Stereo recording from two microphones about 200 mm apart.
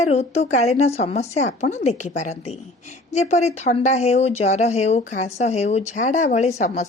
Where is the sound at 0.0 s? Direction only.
35° left (ahead or behind).